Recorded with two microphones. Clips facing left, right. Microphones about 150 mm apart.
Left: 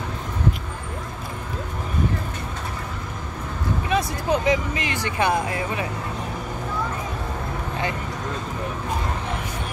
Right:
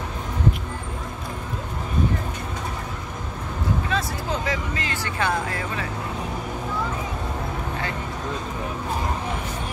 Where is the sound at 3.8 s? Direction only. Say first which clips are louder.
Left 4 dB; 15° left (ahead or behind).